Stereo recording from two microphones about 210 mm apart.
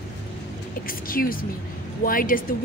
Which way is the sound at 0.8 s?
45° left (ahead or behind).